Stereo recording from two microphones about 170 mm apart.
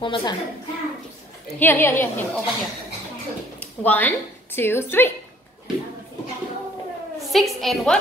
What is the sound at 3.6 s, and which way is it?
Speech, 10° left (ahead or behind).